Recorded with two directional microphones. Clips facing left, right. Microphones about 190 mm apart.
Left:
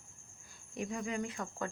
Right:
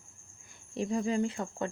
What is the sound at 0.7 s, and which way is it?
Speech, 30° right (ahead or behind).